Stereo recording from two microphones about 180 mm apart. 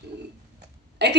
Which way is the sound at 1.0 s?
70° right (ahead or behind).